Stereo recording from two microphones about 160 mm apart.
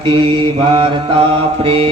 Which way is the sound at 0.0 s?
30° right (ahead or behind).